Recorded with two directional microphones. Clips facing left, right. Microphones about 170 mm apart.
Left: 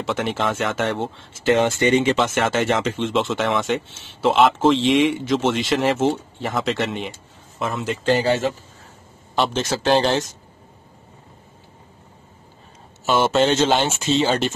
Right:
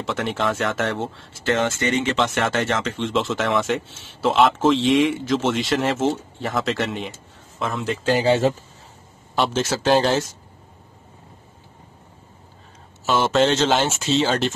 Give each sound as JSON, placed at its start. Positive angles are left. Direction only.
{"t": 0.0, "sound": "speech", "side_deg": 0}
{"t": 1.4, "sound": "speech", "side_deg": 15}
{"t": 2.2, "sound": "speech", "side_deg": 0}
{"t": 2.6, "sound": "speech", "side_deg": 15}
{"t": 3.0, "sound": "speech", "side_deg": 0}
{"t": 9.3, "sound": "speech", "side_deg": -5}
{"t": 13.0, "sound": "speech", "side_deg": 5}